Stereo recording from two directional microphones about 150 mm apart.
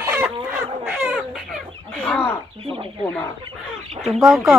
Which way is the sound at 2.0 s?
5° left (ahead or behind).